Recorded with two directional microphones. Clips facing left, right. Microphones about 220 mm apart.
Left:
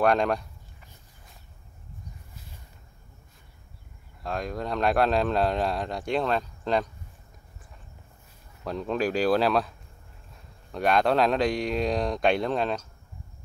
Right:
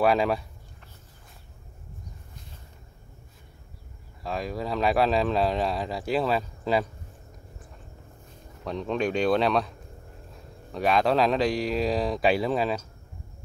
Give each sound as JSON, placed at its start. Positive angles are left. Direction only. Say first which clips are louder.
{"t": 0.0, "sound": "speech", "louder": "even", "side_deg": -5}
{"t": 4.2, "sound": "speech", "louder": "even", "side_deg": 0}
{"t": 8.6, "sound": "speech", "louder": "even", "side_deg": 0}